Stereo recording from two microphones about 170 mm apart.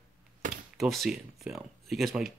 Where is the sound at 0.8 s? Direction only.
Centre (ahead or behind).